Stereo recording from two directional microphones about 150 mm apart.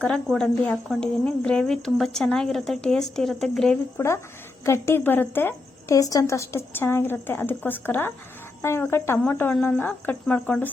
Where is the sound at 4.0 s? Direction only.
20° left (ahead or behind).